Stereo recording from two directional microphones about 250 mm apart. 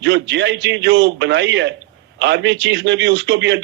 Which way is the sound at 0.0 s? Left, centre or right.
Right.